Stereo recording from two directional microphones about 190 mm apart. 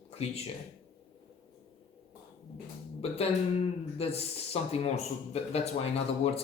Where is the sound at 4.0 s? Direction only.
30° left (ahead or behind).